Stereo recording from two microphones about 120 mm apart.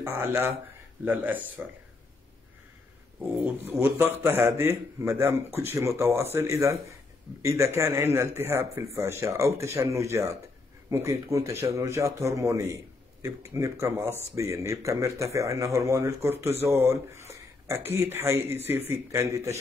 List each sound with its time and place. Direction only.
0.1 s speech: 20° right (ahead or behind)
3.3 s speech: 15° right (ahead or behind)